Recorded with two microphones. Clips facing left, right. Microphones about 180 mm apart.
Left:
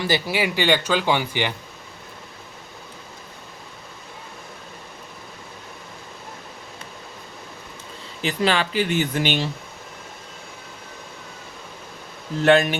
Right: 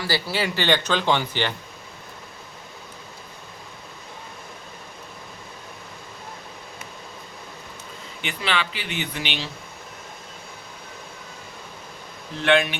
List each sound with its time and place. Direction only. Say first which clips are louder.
0.0 s speech: left 3 dB; 15° left (ahead or behind)
8.2 s speech: left 6 dB; 40° left (ahead or behind)
12.4 s speech: left 4 dB; 40° left (ahead or behind)